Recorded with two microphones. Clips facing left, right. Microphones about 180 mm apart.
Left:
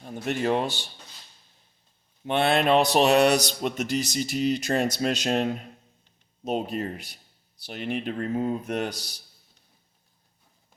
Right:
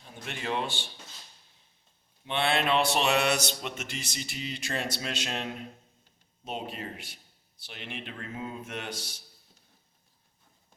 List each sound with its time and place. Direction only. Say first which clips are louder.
0.0 s speech: left 11 dB; 45° left (ahead or behind)
2.2 s speech: left 6 dB; 45° left (ahead or behind)